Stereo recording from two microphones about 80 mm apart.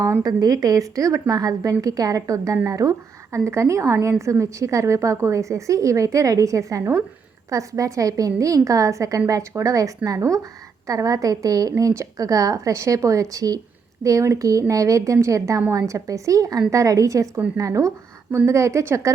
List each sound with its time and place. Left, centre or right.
0.2 s a woman's voice: right
18.3 s a woman's voice: right
18.5 s a woman's voice: right